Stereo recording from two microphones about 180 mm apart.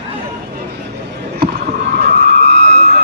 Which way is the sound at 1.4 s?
65° right (ahead or behind).